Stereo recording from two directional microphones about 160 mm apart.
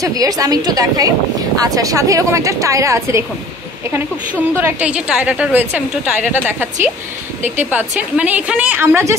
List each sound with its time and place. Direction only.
0.0 s a woman's voice: 20° right (ahead or behind)
4.6 s a woman's voice: 10° right (ahead or behind)
7.7 s a woman's voice: 10° right (ahead or behind)